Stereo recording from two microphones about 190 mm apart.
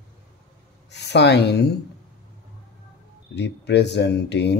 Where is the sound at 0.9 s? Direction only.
65° left (ahead or behind).